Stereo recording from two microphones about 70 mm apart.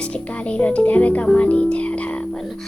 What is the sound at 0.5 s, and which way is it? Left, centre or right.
A child's voice, centre.